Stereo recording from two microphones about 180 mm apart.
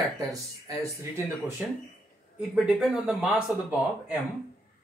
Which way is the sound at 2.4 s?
5° right (ahead or behind).